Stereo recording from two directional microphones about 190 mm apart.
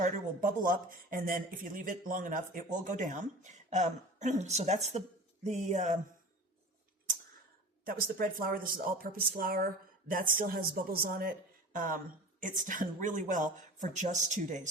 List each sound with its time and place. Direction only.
0.0 s speech: 45° right (ahead or behind)
7.9 s speech: 50° right (ahead or behind)